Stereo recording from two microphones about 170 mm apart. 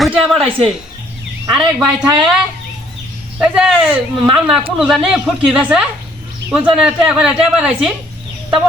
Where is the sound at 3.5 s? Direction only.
5° right (ahead or behind).